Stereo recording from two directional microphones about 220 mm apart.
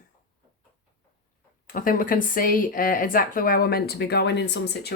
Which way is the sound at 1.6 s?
40° left (ahead or behind).